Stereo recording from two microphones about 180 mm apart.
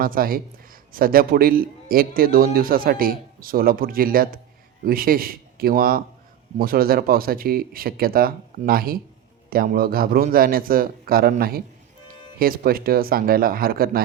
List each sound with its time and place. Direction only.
0.0 s a man's voice: 55° right (ahead or behind)